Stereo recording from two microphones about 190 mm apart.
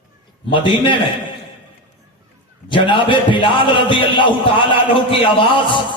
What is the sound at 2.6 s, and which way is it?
A man's voice, 25° left (ahead or behind).